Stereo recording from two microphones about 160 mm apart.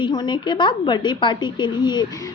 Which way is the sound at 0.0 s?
30° left (ahead or behind).